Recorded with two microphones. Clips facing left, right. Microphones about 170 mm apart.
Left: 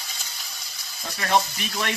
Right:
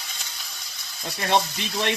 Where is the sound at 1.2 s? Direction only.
25° right (ahead or behind).